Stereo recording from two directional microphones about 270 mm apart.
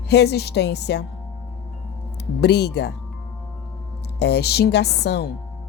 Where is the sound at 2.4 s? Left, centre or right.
Left.